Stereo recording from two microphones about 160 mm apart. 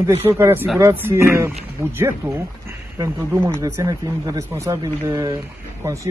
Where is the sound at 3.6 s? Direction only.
20° right (ahead or behind).